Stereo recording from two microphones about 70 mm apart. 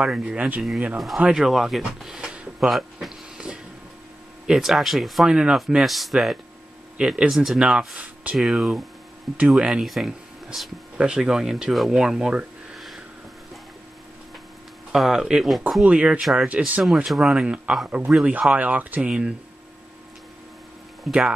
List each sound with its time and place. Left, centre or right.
0.0 s speech: centre
3.4 s music: centre
4.5 s speech: centre
8.4 s speech: centre
12.7 s a sound: centre
14.9 s speech: centre
15.8 s speech: centre
16.8 s speech: centre
21.0 s speech: centre